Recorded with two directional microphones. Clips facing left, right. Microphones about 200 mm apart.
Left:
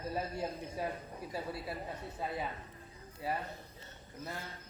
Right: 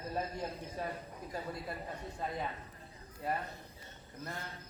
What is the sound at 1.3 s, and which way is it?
A man's voice, 5° left (ahead or behind).